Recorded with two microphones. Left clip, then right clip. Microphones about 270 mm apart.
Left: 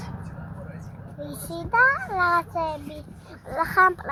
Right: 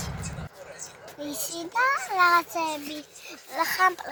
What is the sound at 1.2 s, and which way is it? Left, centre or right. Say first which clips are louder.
A woman's voice: right 1 dB; centre.